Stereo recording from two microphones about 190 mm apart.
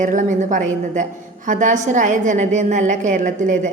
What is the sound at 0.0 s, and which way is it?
A woman's voice, 40° right (ahead or behind).